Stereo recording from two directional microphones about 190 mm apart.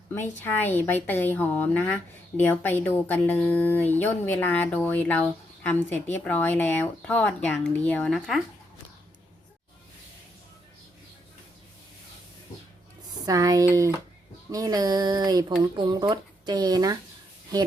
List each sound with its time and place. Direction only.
0.1 s speech: 10° left (ahead or behind)
13.2 s speech: 20° right (ahead or behind)